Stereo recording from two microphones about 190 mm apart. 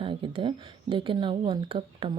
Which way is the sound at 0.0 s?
25° right (ahead or behind).